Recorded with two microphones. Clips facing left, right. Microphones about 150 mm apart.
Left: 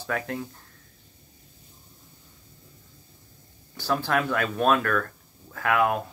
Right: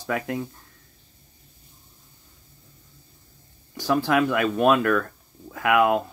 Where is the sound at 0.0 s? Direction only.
10° right (ahead or behind).